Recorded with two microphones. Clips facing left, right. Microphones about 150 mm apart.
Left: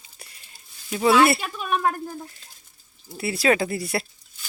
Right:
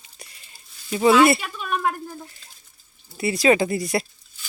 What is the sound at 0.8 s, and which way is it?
Speech, 5° right (ahead or behind).